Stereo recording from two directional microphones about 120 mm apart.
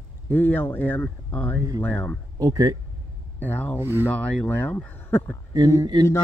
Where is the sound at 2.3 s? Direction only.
30° right (ahead or behind).